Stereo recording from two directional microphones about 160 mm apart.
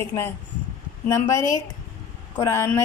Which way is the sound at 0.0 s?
15° left (ahead or behind).